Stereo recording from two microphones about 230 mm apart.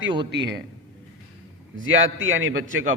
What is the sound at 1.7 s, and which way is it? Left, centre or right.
Speech, right.